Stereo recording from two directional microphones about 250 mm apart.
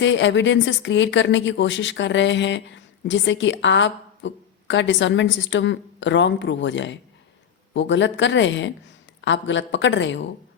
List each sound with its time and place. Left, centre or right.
0.0 s speech: left